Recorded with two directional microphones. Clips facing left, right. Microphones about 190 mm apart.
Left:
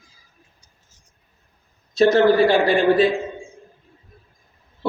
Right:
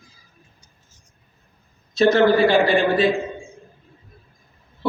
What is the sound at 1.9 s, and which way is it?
A man's voice, 40° left (ahead or behind).